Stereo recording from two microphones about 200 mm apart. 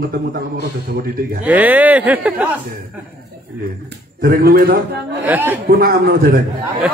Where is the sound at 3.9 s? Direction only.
50° right (ahead or behind).